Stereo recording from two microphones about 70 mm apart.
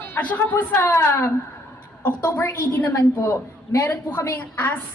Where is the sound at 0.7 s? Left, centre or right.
Left.